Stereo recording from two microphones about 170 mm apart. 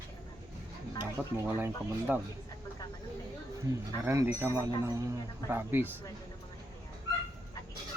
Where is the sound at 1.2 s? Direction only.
10° left (ahead or behind).